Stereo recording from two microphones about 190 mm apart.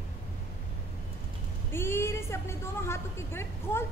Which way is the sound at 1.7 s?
10° left (ahead or behind).